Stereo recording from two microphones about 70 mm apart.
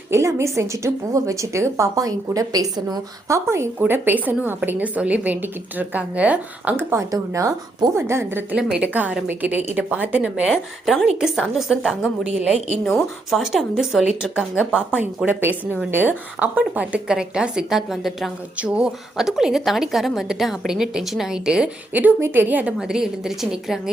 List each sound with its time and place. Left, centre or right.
0.1 s a woman's voice: right
2.0 s speech: right
3.2 s a woman's voice: right
3.8 s a woman's voice: right
6.9 s a woman's voice: right
7.9 s a woman's voice: right
10.4 s a woman's voice: centre
15.3 s a woman's voice: right; by 18.3 s centre
18.5 s a woman's voice: centre
19.1 s a woman's voice: centre
22.2 s a woman's voice: right
22.8 s a woman's voice: centre